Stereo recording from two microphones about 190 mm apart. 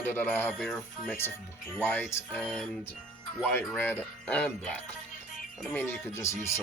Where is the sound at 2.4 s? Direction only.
Centre (ahead or behind).